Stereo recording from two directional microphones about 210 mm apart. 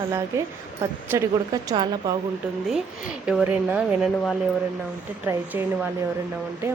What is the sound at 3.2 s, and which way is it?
Speech, 5° right (ahead or behind).